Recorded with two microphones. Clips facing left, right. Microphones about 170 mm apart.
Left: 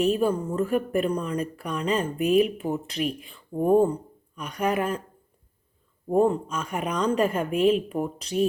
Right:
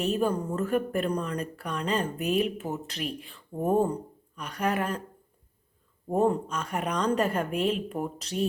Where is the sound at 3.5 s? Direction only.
15° left (ahead or behind).